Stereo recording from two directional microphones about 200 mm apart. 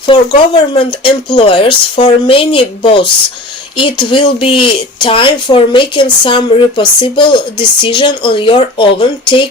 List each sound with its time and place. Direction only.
0.1 s speech: 20° left (ahead or behind)